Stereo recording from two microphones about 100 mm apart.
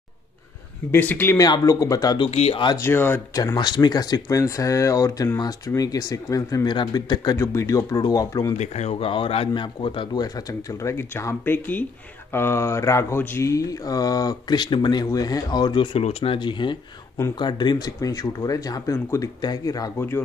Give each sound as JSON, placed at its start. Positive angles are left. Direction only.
{"t": 0.9, "sound": "speech", "side_deg": 20}
{"t": 1.4, "sound": "speech", "side_deg": 40}
{"t": 2.1, "sound": "speech", "side_deg": 80}
{"t": 2.8, "sound": "speech", "side_deg": 20}
{"t": 3.5, "sound": "speech", "side_deg": 45}
{"t": 8.8, "sound": "speech", "side_deg": 65}
{"t": 9.5, "sound": "a man's voice", "side_deg": 55}
{"t": 10.2, "sound": "speech", "side_deg": 35}
{"t": 15.0, "sound": "speech", "side_deg": 40}
{"t": 16.0, "sound": "speech", "side_deg": 75}
{"t": 16.3, "sound": "speech", "side_deg": 50}
{"t": 20.0, "sound": "speech", "side_deg": 20}